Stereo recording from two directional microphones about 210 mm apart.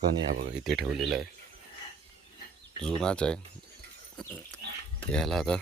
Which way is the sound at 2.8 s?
5° left (ahead or behind).